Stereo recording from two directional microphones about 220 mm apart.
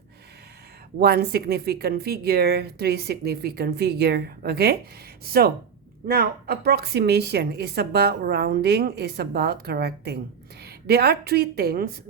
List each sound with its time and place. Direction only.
0.9 s a woman's voice: 45° right (ahead or behind)